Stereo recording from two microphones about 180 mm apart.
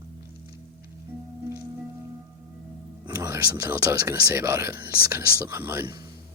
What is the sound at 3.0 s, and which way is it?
Music, 20° right (ahead or behind).